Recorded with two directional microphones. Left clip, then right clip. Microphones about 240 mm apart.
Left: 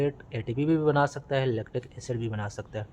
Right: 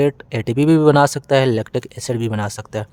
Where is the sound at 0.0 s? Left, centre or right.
Right.